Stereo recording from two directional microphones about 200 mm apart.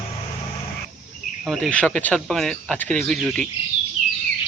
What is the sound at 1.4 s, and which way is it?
Speech, centre (ahead or behind).